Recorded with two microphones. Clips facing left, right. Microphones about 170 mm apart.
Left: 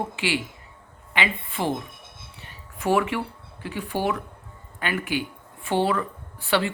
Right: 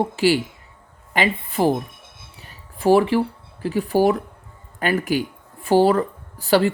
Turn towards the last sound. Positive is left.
turn(degrees=-40)  # may be behind; listen again after turning